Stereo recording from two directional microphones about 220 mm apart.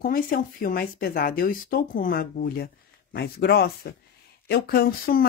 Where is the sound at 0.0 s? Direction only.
40° left (ahead or behind).